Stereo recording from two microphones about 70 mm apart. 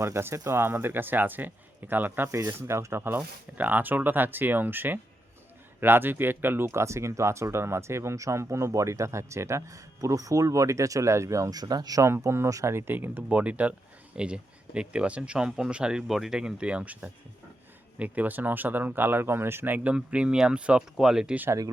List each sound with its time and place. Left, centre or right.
0.0 s speech: right
2.2 s speech: right
3.2 s speech: right
12.0 s speech: right
12.5 s speech: right
12.7 s speech: right; by 21.3 s centre